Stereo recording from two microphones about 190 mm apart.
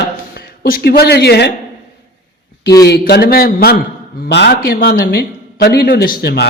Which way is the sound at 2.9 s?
55° left (ahead or behind).